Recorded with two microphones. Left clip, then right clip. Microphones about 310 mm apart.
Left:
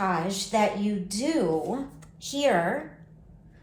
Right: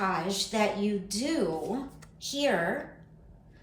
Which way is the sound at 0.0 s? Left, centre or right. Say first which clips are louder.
Left 2 dB; centre.